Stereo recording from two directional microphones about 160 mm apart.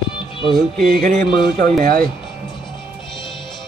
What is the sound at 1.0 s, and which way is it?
Music, 55° right (ahead or behind).